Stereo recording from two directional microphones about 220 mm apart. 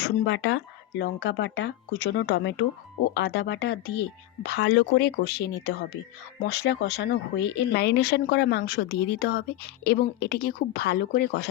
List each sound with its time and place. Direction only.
0.0 s speech: 55° left (ahead or behind)